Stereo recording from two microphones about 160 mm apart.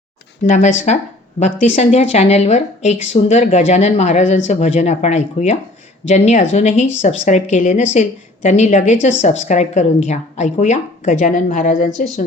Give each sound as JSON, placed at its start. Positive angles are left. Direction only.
{"t": 0.4, "sound": "speech", "side_deg": 50}